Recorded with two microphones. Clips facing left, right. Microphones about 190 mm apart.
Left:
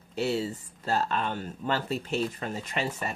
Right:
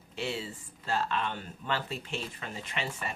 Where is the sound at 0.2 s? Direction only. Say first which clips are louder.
Left 7 dB; 40° left (ahead or behind).